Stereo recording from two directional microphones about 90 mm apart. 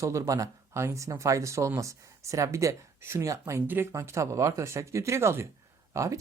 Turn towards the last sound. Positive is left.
turn(degrees=-35)  # may be behind; listen again after turning